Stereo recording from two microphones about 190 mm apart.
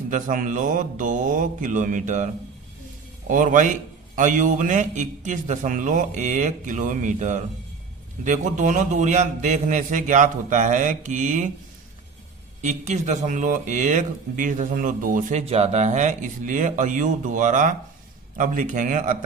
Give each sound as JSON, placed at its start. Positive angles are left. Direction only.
{"t": 0.1, "sound": "speech", "side_deg": -45}
{"t": 12.6, "sound": "speech", "side_deg": -40}